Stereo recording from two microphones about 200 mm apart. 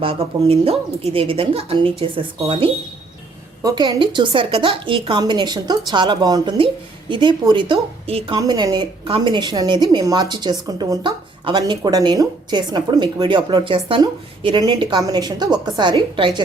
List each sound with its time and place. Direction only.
0.0 s a woman's voice: 30° right (ahead or behind)
3.6 s a woman's voice: 20° right (ahead or behind)